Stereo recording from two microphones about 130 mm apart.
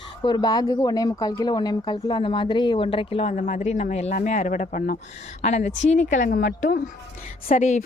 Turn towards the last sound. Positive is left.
turn(degrees=65)  # may be behind; listen again after turning